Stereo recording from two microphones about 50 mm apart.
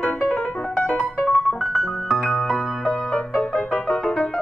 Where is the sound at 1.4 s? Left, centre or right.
Centre.